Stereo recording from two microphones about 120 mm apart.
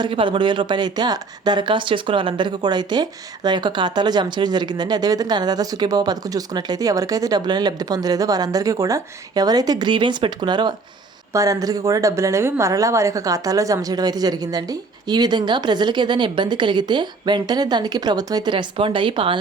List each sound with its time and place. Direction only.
0.0 s speech: 45° right (ahead or behind)
11.3 s speech: 25° right (ahead or behind); by 19.4 s 45° right (ahead or behind)